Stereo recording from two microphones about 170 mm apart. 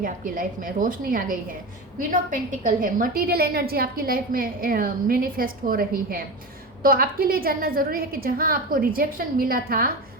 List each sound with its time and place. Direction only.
0.0 s a woman's voice: 55° right (ahead or behind)